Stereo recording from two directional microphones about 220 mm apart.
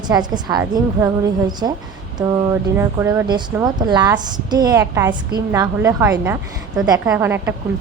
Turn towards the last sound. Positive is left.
turn(degrees=-10)  # may be behind; listen again after turning